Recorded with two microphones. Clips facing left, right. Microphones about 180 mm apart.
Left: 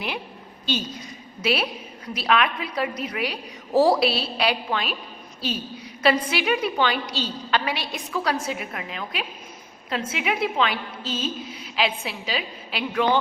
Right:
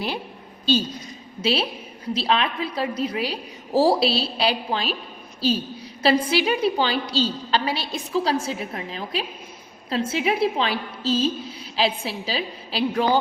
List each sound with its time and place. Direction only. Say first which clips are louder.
0.6 s a woman's voice: right 6 dB; 30° right (ahead or behind)
6.0 s a woman's voice: right 2 dB; 30° right (ahead or behind)